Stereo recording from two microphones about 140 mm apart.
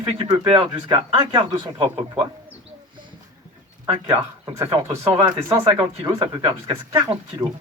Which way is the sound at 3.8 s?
40° right (ahead or behind).